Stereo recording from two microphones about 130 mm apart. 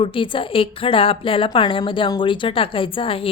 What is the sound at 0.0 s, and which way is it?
A woman's voice, 40° left (ahead or behind).